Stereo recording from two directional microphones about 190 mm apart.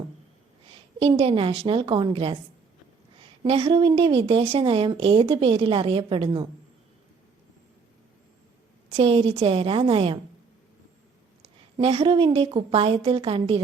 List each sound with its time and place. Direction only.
0.9 s a woman's voice: 30° right (ahead or behind)
3.4 s a woman's voice: 30° right (ahead or behind)
8.9 s a woman's voice: 30° right (ahead or behind)
11.8 s a woman's voice: 30° right (ahead or behind)